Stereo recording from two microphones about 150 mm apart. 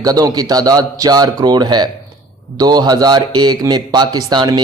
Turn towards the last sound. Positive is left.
turn(degrees=-25)  # may be behind; listen again after turning